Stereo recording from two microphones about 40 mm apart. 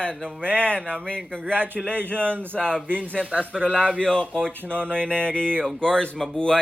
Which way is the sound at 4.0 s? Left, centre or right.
Left.